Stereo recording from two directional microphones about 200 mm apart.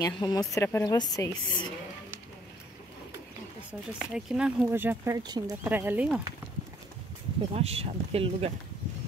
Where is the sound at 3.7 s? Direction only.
5° right (ahead or behind); by 5.5 s 20° right (ahead or behind).